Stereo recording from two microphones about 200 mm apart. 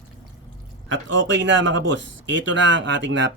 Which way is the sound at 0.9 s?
70° right (ahead or behind).